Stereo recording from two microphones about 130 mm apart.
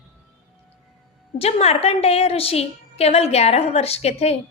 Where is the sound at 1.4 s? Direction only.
55° left (ahead or behind).